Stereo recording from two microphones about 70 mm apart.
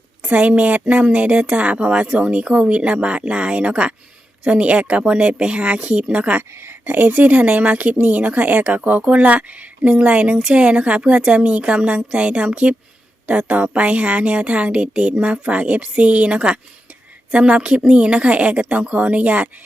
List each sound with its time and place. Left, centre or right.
0.2 s a woman's voice: centre
6.5 s a woman's voice: right